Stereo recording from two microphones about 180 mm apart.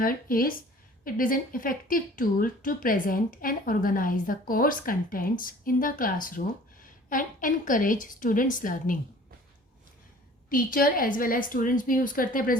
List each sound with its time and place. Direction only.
0.0 s a woman's voice: 55° left (ahead or behind)
10.5 s a woman's voice: 50° left (ahead or behind)